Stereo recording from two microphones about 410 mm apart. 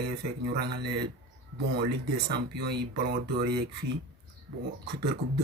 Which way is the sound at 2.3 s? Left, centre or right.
Right.